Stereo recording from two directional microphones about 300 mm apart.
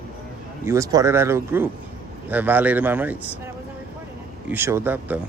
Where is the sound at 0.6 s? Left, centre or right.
Centre.